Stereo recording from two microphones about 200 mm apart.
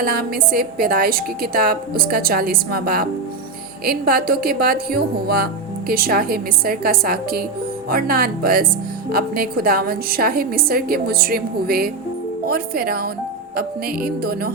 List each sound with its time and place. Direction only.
0.0 s a woman's voice: 45° right (ahead or behind)